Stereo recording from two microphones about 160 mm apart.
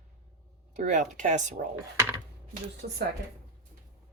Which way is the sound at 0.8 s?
50° right (ahead or behind).